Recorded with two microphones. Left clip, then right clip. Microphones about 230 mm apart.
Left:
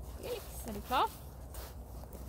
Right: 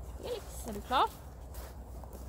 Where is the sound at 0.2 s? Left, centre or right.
Left.